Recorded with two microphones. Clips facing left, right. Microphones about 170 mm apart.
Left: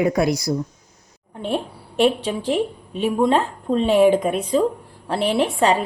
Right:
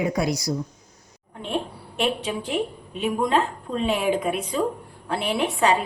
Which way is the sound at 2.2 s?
30° left (ahead or behind).